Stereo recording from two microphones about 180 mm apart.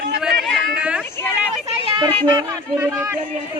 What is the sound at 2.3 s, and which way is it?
Speech, 25° right (ahead or behind).